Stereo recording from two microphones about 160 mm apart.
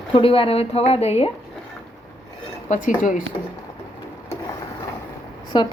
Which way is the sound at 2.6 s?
50° left (ahead or behind).